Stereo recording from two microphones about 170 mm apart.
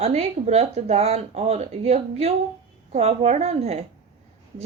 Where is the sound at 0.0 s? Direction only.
40° right (ahead or behind).